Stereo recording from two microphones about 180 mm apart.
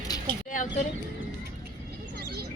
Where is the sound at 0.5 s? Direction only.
45° left (ahead or behind).